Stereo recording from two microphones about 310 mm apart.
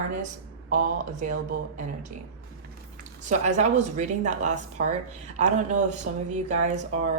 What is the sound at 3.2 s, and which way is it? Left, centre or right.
Speech, right.